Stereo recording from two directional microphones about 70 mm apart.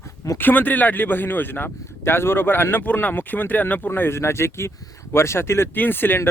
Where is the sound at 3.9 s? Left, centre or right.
Left.